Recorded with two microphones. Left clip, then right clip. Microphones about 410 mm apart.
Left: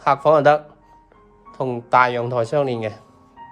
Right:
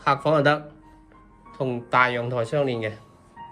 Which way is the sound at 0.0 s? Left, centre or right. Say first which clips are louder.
Left 6 dB; centre.